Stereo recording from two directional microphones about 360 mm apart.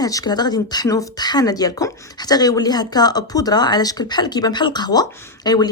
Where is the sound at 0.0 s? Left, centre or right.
Centre.